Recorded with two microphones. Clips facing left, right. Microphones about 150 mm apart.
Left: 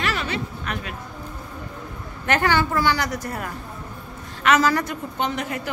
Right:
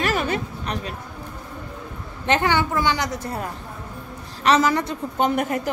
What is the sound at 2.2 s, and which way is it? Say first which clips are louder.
A woman's voice: even; 20° right (ahead or behind).